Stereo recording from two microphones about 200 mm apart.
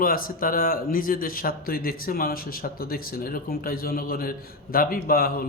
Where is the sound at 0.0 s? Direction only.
45° left (ahead or behind).